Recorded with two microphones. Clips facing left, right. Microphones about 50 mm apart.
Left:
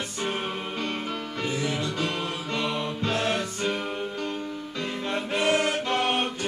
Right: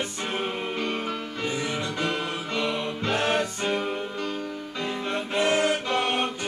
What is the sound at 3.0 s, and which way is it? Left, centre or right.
Music, right.